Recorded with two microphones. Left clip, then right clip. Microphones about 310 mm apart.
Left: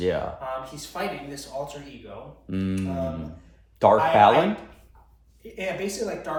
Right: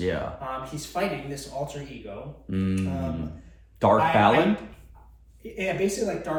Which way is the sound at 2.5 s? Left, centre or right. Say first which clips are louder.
Even; left.